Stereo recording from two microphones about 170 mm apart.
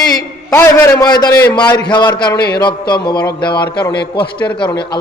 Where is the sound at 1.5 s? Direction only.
25° left (ahead or behind).